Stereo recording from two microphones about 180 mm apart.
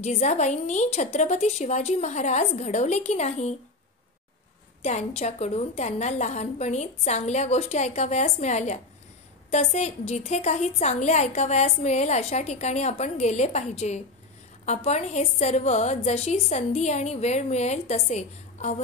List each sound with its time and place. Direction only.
0.0 s a woman's voice: 40° left (ahead or behind)
4.8 s a woman's voice: 40° left (ahead or behind)